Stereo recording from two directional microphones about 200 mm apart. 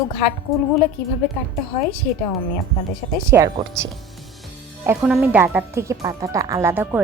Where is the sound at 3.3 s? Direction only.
15° right (ahead or behind).